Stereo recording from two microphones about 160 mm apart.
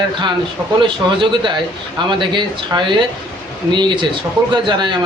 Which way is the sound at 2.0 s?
30° right (ahead or behind).